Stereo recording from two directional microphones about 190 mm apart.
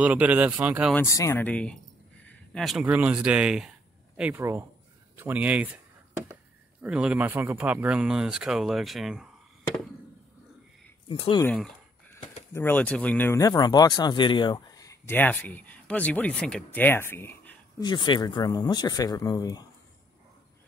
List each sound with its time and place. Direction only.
0.0 s speech: 5° right (ahead or behind)
0.9 s speech: 15° left (ahead or behind); by 5.8 s 5° right (ahead or behind)
6.8 s speech: 5° right (ahead or behind)
11.1 s speech: 25° left (ahead or behind)
11.4 s a sound: 5° left (ahead or behind)
12.5 s speech: 10° left (ahead or behind)
17.8 s speech: 25° left (ahead or behind)